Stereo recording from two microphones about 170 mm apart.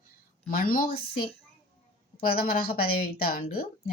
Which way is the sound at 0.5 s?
55° left (ahead or behind).